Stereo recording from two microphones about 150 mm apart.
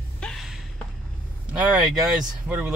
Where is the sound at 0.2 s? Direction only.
Centre (ahead or behind).